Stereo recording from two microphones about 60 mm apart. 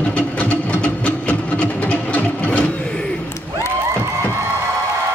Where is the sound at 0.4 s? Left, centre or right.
Left.